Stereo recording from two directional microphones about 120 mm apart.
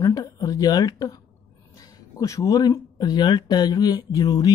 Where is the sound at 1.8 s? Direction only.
30° left (ahead or behind).